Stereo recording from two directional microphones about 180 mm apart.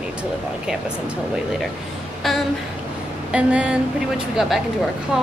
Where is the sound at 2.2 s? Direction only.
Centre (ahead or behind).